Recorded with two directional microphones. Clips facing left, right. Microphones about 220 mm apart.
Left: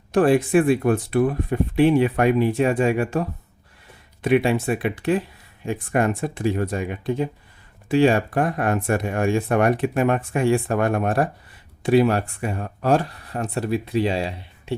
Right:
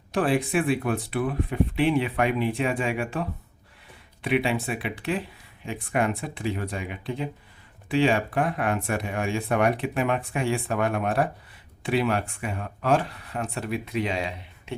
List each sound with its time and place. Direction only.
0.1 s speech: 45° left (ahead or behind)